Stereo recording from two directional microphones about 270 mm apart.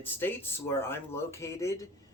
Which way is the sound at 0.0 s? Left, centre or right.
Centre.